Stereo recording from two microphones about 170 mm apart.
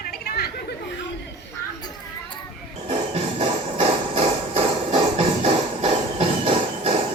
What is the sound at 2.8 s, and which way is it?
Hammer, 40° right (ahead or behind).